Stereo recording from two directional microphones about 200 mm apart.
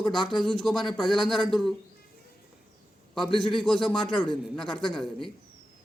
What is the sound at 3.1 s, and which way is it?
Speech, centre (ahead or behind).